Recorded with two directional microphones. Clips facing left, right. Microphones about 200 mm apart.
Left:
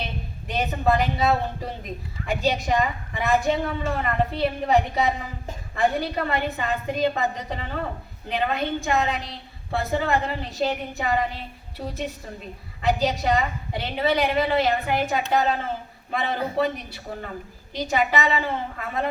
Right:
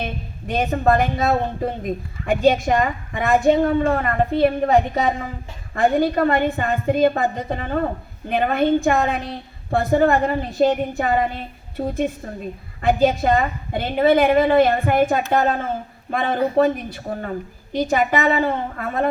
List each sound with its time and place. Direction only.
0.0 s a woman's voice: 50° right (ahead or behind)